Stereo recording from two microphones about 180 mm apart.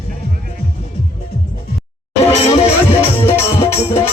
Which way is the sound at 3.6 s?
35° left (ahead or behind).